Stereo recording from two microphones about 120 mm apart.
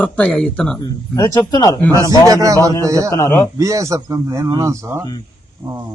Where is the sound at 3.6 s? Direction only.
25° right (ahead or behind).